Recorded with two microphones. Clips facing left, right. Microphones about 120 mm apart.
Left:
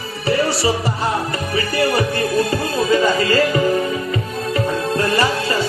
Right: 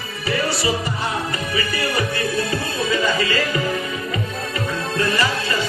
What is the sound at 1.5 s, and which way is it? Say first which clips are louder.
Music: left 6 dB; 40° left (ahead or behind).